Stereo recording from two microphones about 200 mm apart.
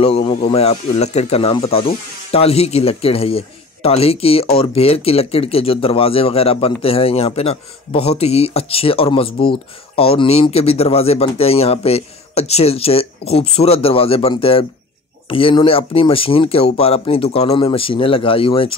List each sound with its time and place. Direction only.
0.0 s speech: 30° left (ahead or behind)